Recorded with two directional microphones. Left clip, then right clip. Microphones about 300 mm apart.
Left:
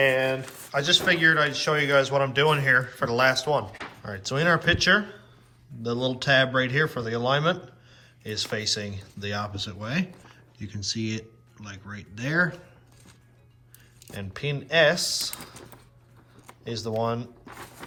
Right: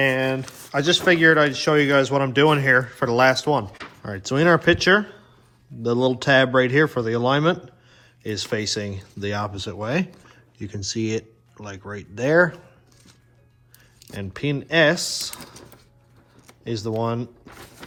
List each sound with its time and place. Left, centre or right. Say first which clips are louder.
0.0 s speech: right 1 dB; right
3.7 s speech: even; centre
4.0 s speech: right 5 dB; right
14.1 s speech: right 5 dB; right
16.6 s speech: right 2 dB; right